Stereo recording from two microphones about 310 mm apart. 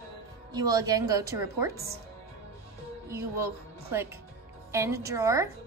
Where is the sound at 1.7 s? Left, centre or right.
Right.